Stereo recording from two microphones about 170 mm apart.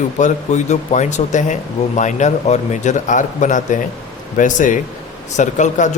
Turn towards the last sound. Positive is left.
turn(degrees=45)  # may be behind; listen again after turning